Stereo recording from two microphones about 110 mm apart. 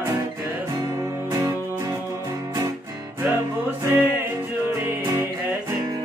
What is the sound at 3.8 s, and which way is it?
Music, 20° right (ahead or behind).